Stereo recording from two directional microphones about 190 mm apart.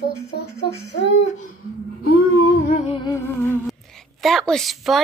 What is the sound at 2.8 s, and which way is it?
Music, 25° left (ahead or behind).